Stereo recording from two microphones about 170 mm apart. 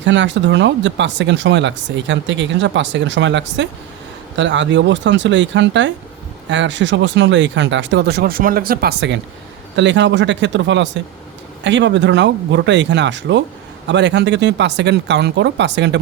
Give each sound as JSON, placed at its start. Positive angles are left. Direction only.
{"t": 0.0, "sound": "speech", "side_deg": -90}